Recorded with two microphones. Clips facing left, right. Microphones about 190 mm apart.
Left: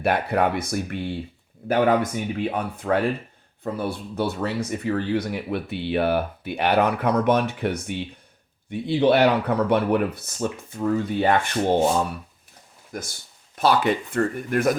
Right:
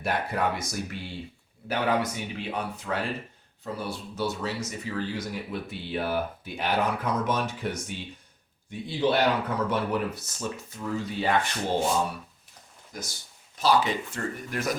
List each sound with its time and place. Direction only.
0.0 s speech: 60° left (ahead or behind)
12.9 s speech: 55° left (ahead or behind)